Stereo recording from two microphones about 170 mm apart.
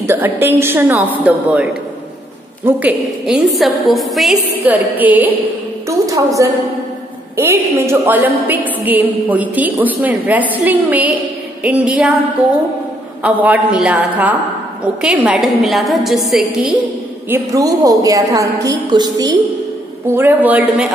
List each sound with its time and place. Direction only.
0.0 s a woman's voice: 15° right (ahead or behind)
13.2 s a woman's voice: 10° right (ahead or behind)
17.3 s a woman's voice: 20° right (ahead or behind)
20.2 s a woman's voice: 10° right (ahead or behind)